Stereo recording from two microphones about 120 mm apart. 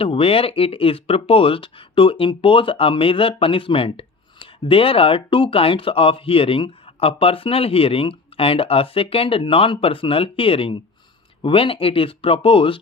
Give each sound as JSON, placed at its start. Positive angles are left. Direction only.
{"t": 0.0, "sound": "speech", "side_deg": 50}